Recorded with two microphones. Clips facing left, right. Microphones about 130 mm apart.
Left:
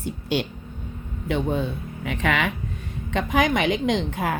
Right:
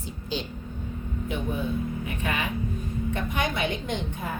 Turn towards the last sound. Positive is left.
turn(degrees=85)